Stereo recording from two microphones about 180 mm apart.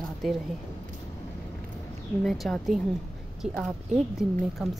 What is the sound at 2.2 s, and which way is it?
Speech, centre (ahead or behind).